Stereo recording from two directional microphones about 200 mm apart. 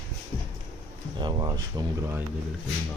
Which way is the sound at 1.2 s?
20° right (ahead or behind).